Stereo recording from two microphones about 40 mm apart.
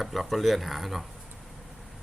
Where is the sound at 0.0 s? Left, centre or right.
Centre.